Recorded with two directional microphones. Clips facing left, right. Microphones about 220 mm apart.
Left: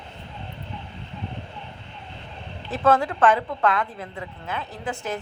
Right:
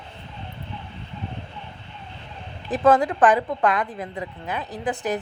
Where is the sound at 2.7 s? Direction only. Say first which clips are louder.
Right 3 dB; 15° right (ahead or behind).